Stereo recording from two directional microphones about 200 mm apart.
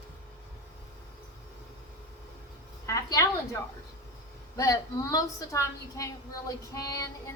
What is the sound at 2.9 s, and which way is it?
Speech, 15° left (ahead or behind).